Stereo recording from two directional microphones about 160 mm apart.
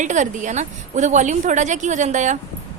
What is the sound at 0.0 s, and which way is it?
A woman's voice, 50° right (ahead or behind).